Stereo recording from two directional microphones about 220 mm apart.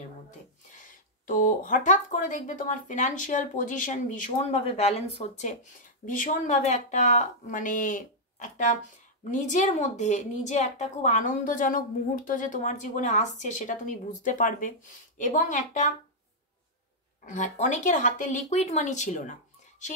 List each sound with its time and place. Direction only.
1.2 s a woman's voice: 40° left (ahead or behind)
17.2 s a woman's voice: 35° left (ahead or behind)